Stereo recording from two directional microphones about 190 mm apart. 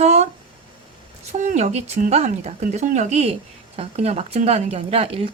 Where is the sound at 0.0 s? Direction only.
35° right (ahead or behind).